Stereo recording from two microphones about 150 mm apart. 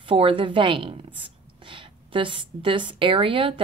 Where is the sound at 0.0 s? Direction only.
35° right (ahead or behind).